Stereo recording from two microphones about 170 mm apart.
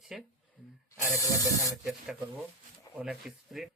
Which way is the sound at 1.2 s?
20° left (ahead or behind).